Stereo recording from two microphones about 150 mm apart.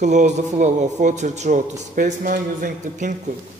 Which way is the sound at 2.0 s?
60° right (ahead or behind).